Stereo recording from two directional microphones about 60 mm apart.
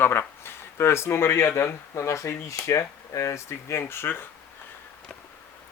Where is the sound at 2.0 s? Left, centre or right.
Left.